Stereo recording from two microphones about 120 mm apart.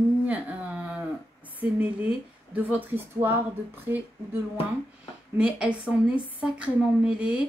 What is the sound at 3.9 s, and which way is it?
Speech, 20° right (ahead or behind).